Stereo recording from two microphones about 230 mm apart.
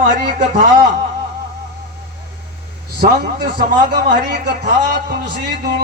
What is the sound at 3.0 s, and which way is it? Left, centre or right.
Music, right.